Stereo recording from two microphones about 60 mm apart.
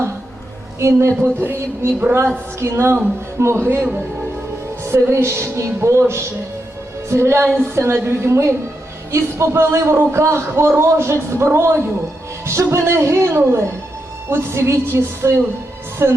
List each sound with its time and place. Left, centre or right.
0.8 s speech: right
1.2 s music: right
2.6 s speech: right
5.1 s speech: right